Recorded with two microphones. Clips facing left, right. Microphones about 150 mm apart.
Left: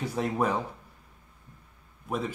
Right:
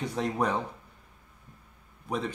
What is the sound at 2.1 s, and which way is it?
Speech, 5° left (ahead or behind).